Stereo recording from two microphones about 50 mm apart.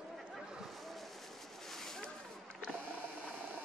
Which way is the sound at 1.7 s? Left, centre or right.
Centre.